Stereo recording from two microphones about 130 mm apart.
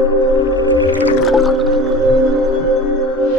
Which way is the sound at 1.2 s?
Centre (ahead or behind).